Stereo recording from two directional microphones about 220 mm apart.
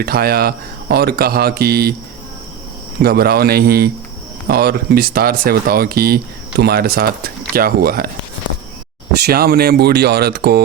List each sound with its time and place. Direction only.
0.0 s speech: 45° right (ahead or behind)
3.0 s speech: 45° right (ahead or behind)
9.2 s speech: 45° right (ahead or behind)